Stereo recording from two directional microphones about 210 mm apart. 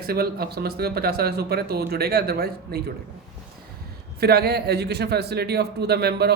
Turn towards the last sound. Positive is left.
turn(degrees=-50)  # may be behind; listen again after turning